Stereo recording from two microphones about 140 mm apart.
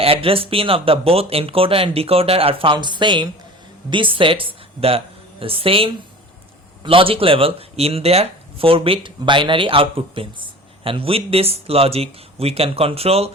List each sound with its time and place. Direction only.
0.0 s speech: 40° right (ahead or behind)